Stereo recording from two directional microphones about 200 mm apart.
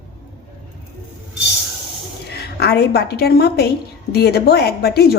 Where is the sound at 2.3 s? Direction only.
55° left (ahead or behind).